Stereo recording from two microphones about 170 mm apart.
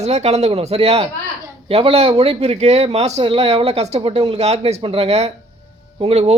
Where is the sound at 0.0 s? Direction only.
40° right (ahead or behind).